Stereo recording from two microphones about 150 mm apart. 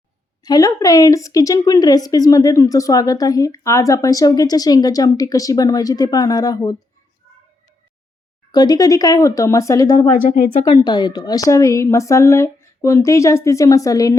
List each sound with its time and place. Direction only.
0.4 s a woman's voice: 25° left (ahead or behind)
8.5 s a woman's voice: 25° left (ahead or behind)